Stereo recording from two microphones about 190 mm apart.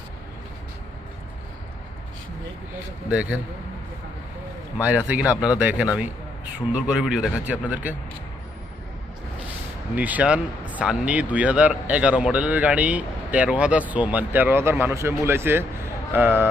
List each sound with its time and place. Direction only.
3.1 s speech: 5° right (ahead or behind)
4.8 s speech: 5° right (ahead or behind)
9.9 s speech: 10° right (ahead or behind)